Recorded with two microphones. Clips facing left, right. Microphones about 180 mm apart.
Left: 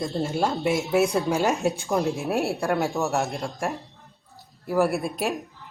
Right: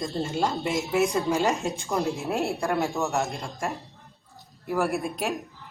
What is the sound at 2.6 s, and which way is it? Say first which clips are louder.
Speech: left 2 dB; centre (ahead or behind).